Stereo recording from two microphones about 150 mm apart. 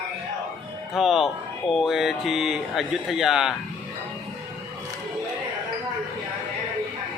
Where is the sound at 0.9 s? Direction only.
Centre (ahead or behind).